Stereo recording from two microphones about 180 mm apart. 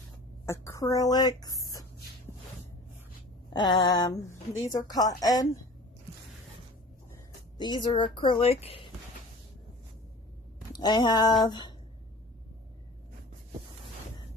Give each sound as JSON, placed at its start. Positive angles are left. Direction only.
{"t": 0.4, "sound": "speech", "side_deg": 15}
{"t": 3.5, "sound": "speech", "side_deg": 25}
{"t": 7.6, "sound": "speech", "side_deg": 25}
{"t": 10.7, "sound": "speech", "side_deg": 25}